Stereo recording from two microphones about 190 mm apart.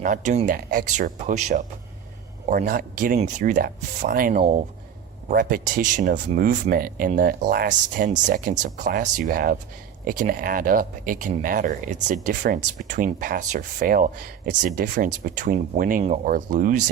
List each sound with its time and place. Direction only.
0.0 s speech: 40° right (ahead or behind)
4.4 s speech: 35° right (ahead or behind)
5.3 s speech: 50° right (ahead or behind)